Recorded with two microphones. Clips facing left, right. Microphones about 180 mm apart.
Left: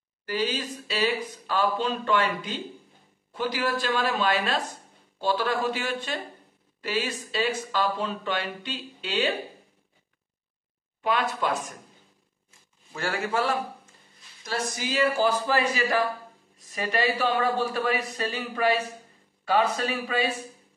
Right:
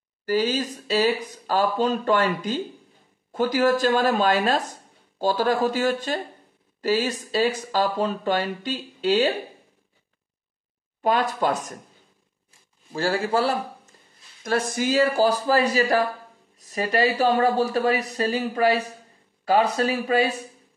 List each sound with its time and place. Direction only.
0.2 s speech: 40° right (ahead or behind)
11.0 s speech: 40° right (ahead or behind)
12.9 s speech: 30° right (ahead or behind)
14.4 s speech: 55° right (ahead or behind)